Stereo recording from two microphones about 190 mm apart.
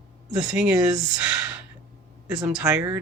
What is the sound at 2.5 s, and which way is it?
Speech, 5° right (ahead or behind).